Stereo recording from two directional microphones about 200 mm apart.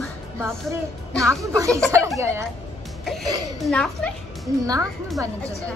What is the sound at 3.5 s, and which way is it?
Speech, centre (ahead or behind).